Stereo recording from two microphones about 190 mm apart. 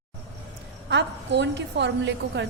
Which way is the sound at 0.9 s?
65° right (ahead or behind).